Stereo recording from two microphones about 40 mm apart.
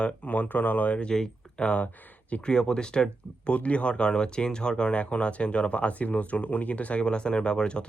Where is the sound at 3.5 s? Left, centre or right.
Left.